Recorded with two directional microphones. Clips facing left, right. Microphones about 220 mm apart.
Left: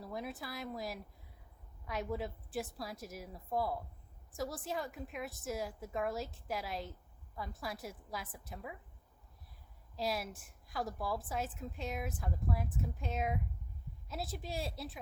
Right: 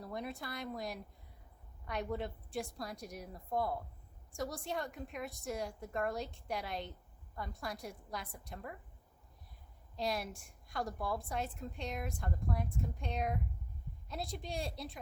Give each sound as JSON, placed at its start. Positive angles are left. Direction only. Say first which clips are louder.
{"t": 0.0, "sound": "a woman's voice", "louder": "even", "side_deg": 0}
{"t": 9.9, "sound": "a woman's voice", "louder": "even", "side_deg": 0}